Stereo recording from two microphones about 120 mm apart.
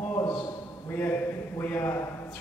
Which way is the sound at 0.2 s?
30° left (ahead or behind).